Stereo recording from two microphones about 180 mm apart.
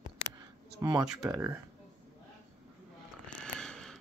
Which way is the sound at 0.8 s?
20° right (ahead or behind).